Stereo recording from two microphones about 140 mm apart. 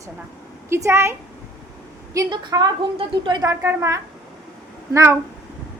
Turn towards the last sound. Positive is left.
turn(degrees=-20)  # may be behind; listen again after turning